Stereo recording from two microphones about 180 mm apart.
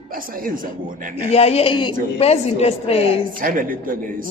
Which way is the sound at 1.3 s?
35° left (ahead or behind).